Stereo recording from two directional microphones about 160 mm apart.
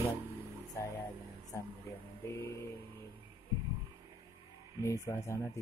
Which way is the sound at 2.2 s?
15° left (ahead or behind).